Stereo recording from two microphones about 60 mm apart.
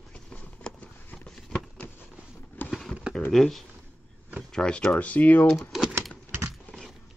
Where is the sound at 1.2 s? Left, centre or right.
Centre.